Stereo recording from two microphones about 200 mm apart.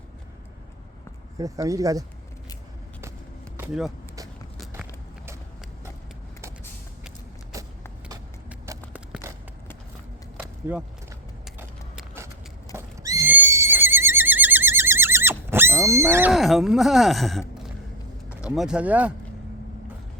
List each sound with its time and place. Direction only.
1.4 s speech: 15° right (ahead or behind)
3.6 s speech: 5° right (ahead or behind)
7.5 s vehicle: 15° right (ahead or behind)
8.4 s a sound: 10° right (ahead or behind)
10.3 s a sound: 5° right (ahead or behind)
12.7 s neigh: 15° right (ahead or behind)
16.1 s speech: 5° right (ahead or behind)
18.5 s speech: 5° right (ahead or behind)